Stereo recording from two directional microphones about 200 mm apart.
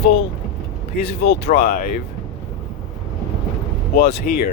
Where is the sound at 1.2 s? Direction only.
50° left (ahead or behind).